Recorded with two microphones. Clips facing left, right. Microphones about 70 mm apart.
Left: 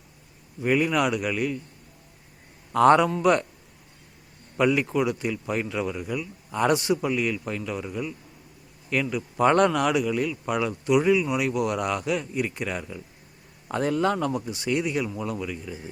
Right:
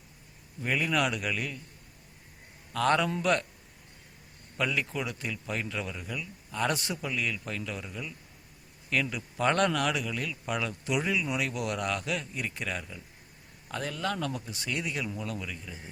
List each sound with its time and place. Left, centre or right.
0.6 s speech: centre
2.7 s a man's voice: left
4.5 s speech: centre
13.7 s a man's voice: left
14.2 s speech: centre